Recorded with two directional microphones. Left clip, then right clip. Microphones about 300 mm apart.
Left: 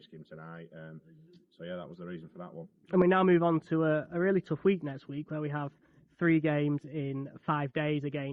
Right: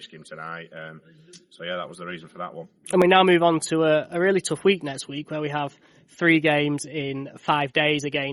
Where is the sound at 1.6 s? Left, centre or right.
Right.